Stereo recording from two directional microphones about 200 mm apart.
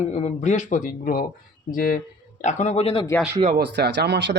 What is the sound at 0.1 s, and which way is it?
A man's voice, 35° left (ahead or behind).